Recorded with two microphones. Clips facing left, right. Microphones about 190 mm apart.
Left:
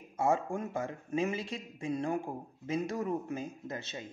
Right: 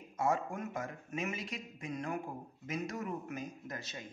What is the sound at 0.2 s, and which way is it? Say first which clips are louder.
Speech: left 4 dB; 30° left (ahead or behind).